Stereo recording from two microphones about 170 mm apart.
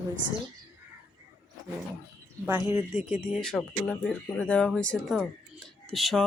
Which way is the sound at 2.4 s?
15° right (ahead or behind).